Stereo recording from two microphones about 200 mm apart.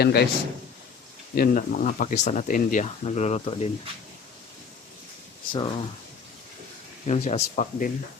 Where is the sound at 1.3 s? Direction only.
45° left (ahead or behind).